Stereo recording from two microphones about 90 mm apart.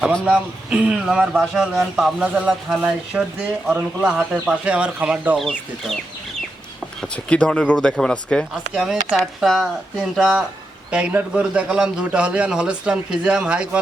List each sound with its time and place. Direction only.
0.3 s a man's voice: 10° right (ahead or behind)
2.2 s a man's voice: 15° right (ahead or behind)
5.4 s speech: centre (ahead or behind)
7.0 s speech: 10° left (ahead or behind)
8.7 s a man's voice: 5° right (ahead or behind)